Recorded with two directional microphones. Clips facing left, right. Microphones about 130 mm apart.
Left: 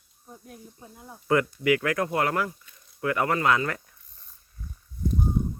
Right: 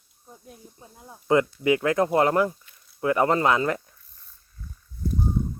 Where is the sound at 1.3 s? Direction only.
20° right (ahead or behind).